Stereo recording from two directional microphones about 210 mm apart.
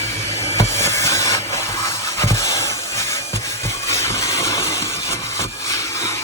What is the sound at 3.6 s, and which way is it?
Vehicle, 15° left (ahead or behind).